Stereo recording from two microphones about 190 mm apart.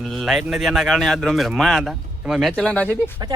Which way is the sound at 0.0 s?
Centre (ahead or behind).